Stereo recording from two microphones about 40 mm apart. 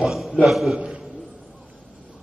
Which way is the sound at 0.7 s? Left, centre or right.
Right.